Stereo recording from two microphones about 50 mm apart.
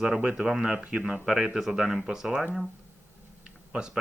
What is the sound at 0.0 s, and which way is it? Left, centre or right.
Speech, centre.